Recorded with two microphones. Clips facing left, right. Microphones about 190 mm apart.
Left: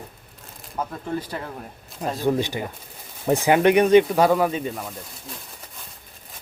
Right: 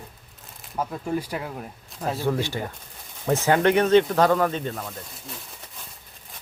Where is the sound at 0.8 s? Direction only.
10° right (ahead or behind).